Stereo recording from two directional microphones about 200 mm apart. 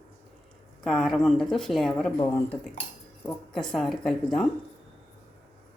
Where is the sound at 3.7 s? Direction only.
Centre (ahead or behind).